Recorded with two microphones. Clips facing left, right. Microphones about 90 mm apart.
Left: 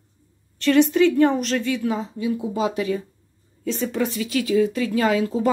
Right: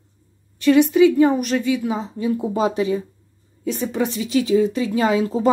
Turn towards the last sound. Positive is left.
turn(degrees=-25)  # may be behind; listen again after turning